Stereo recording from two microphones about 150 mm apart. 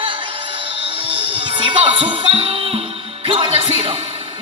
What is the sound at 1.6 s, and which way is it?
A man's voice, 35° right (ahead or behind).